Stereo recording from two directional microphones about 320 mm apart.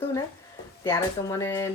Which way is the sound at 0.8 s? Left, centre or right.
Centre.